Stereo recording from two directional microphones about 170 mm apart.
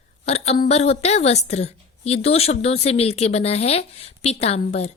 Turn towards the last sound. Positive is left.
turn(degrees=40)  # may be behind; listen again after turning